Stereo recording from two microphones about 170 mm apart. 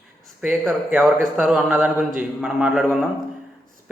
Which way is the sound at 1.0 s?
Centre (ahead or behind).